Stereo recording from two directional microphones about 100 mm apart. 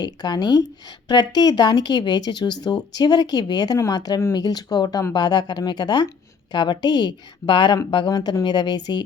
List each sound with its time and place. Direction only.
0.0 s speech: 45° left (ahead or behind)